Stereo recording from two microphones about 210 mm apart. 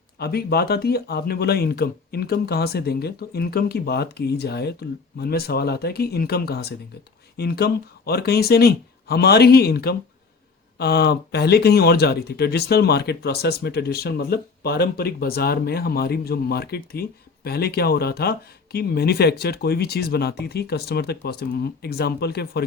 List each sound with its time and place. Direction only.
0.2 s speech: 50° left (ahead or behind)